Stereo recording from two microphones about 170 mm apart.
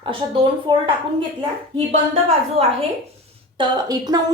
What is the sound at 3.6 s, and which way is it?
Speech, 25° right (ahead or behind).